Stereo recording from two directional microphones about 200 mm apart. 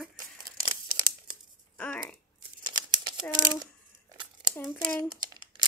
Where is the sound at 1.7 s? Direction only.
5° left (ahead or behind).